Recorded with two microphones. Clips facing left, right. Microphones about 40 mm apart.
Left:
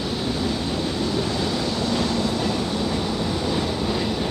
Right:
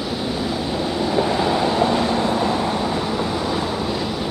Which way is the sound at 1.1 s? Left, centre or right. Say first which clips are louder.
Right 5 dB; right.